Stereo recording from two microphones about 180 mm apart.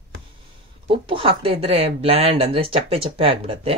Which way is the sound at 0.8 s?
30° right (ahead or behind).